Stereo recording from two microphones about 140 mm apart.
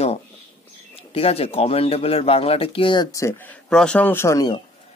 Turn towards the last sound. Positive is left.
turn(degrees=20)  # may be behind; listen again after turning